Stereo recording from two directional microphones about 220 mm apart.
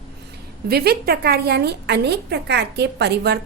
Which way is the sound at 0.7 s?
45° right (ahead or behind).